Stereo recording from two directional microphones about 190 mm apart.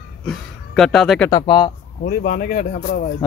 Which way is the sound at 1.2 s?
20° left (ahead or behind).